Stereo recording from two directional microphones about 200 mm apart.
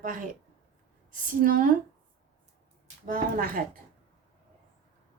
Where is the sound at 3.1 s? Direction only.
45° right (ahead or behind).